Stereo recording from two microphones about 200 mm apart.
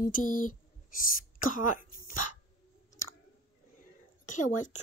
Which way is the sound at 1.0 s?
45° left (ahead or behind).